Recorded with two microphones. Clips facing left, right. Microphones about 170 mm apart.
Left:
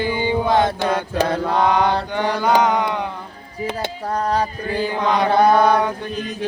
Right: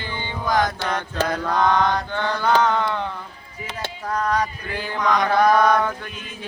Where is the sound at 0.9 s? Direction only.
10° left (ahead or behind).